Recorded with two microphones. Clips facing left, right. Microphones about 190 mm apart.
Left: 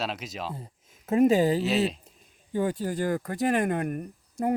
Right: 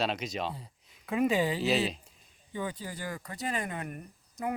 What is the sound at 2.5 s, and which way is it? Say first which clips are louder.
Speech: left 10 dB; 45° left (ahead or behind).